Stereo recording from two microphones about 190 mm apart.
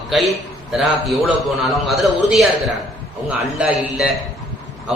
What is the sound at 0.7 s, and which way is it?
A man's voice, centre (ahead or behind).